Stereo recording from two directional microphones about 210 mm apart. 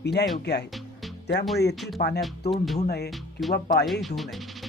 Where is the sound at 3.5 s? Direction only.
50° left (ahead or behind).